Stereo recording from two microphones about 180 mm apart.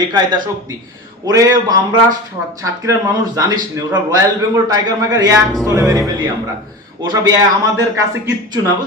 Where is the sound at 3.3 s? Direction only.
20° right (ahead or behind).